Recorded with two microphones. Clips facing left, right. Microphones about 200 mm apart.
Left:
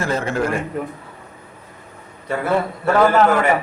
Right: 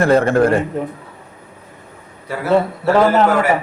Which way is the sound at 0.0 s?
60° right (ahead or behind).